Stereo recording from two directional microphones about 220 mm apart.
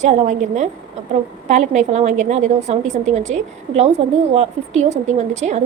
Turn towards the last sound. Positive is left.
turn(degrees=-30)  # may be behind; listen again after turning